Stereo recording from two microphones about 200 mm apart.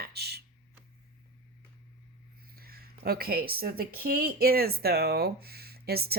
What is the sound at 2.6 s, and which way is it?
Speech, 50° right (ahead or behind).